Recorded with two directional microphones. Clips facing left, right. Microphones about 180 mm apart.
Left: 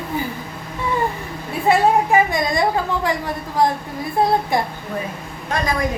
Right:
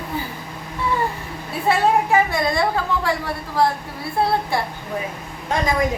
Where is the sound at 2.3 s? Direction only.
15° left (ahead or behind).